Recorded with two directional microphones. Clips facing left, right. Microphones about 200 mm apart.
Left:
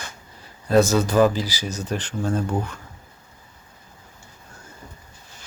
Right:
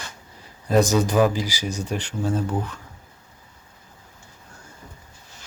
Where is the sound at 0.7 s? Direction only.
15° right (ahead or behind).